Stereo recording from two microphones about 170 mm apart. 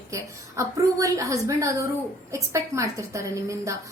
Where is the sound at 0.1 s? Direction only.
20° right (ahead or behind).